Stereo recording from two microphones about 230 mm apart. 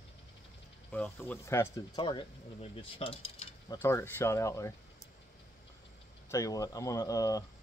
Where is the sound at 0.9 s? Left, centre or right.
Centre; by 3.8 s left.